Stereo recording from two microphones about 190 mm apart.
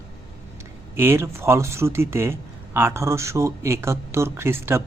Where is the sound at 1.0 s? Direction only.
15° right (ahead or behind).